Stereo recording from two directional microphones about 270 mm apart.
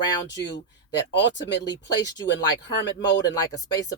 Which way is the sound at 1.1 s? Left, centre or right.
Left.